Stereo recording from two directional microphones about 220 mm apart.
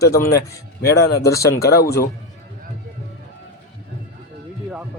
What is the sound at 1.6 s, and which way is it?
Speech, 45° left (ahead or behind).